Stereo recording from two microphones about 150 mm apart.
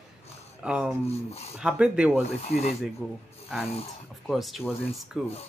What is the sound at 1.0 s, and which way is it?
Speech, 45° left (ahead or behind).